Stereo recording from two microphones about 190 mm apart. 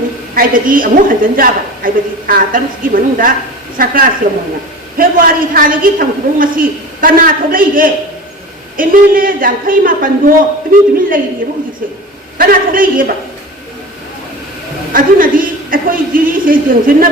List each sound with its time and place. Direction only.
0.3 s a woman's voice: 45° right (ahead or behind)
12.4 s a woman's voice: 50° right (ahead or behind)
14.9 s a woman's voice: 45° right (ahead or behind)